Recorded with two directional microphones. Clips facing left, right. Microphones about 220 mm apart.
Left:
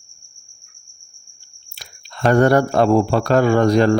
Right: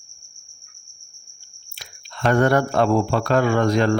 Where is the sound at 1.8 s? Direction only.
35° left (ahead or behind).